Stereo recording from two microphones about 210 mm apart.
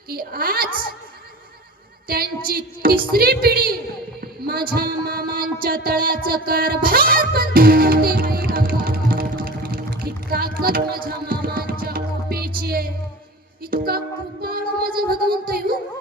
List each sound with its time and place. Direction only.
0.1 s music: 45° right (ahead or behind)
2.0 s music: 45° right (ahead or behind)
4.2 s a sound: 45° right (ahead or behind)
4.7 s music: 45° right (ahead or behind)
12.6 s a sound: 45° right (ahead or behind)
14.4 s music: 45° right (ahead or behind)